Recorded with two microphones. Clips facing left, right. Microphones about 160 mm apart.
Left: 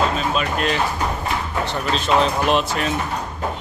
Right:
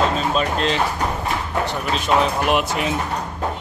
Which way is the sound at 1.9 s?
10° right (ahead or behind).